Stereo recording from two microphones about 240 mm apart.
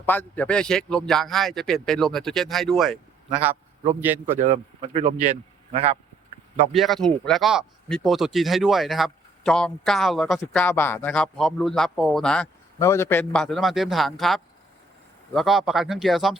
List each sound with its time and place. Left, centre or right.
0.0 s a man's voice: centre
4.8 s speech: right
6.7 s speech: centre